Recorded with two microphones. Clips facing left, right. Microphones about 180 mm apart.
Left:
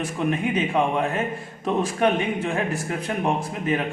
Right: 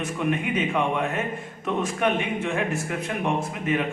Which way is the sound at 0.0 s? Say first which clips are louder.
Left 2 dB; 30° left (ahead or behind).